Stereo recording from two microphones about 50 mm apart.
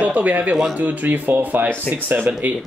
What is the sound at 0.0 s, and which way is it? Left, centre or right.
Speech, right.